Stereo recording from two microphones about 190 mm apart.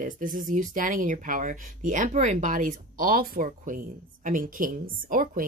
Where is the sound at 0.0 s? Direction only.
45° right (ahead or behind).